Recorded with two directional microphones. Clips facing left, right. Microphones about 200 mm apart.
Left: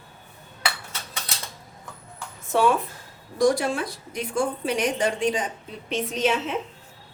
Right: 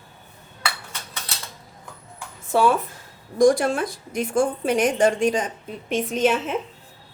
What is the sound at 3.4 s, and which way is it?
A woman's voice, 50° right (ahead or behind).